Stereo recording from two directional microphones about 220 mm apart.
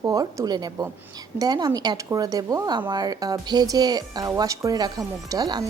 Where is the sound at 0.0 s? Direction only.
15° right (ahead or behind).